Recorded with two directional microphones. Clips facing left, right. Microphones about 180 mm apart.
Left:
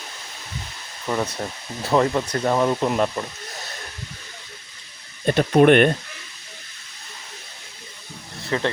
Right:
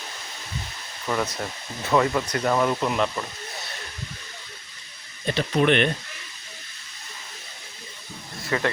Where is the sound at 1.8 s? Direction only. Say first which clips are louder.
Left 2 dB; 30° left (ahead or behind).